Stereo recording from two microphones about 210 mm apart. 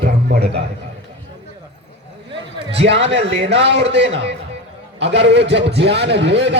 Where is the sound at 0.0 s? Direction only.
50° right (ahead or behind).